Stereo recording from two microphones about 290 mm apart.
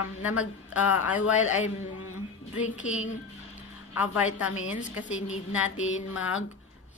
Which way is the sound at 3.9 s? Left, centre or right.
Centre.